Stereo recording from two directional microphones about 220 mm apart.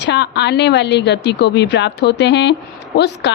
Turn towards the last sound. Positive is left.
turn(degrees=50)  # may be behind; listen again after turning